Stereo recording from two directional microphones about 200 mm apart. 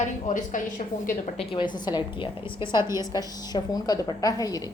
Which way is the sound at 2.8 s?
15° right (ahead or behind).